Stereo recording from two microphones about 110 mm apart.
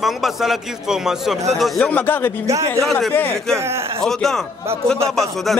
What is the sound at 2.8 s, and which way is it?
Speech, centre (ahead or behind).